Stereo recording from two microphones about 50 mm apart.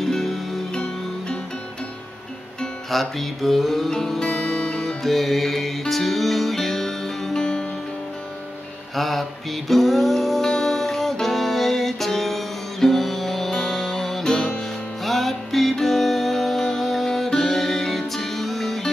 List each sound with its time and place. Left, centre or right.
0.0 s music: centre
0.7 s music: centre
2.9 s music: centre
5.0 s music: centre
8.9 s music: centre